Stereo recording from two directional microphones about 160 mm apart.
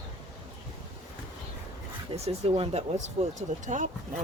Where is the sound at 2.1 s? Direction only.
40° right (ahead or behind).